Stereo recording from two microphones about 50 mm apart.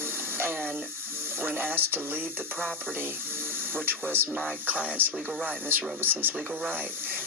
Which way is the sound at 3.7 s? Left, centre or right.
Right.